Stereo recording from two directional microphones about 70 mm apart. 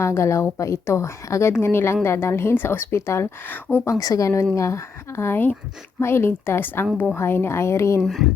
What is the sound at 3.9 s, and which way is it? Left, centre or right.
A woman's voice, left.